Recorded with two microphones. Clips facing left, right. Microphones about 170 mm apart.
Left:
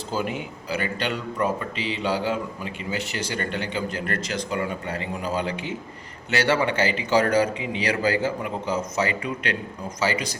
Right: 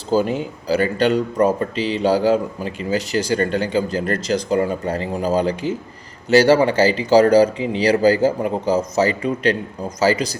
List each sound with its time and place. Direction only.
0.1 s speech: 35° right (ahead or behind)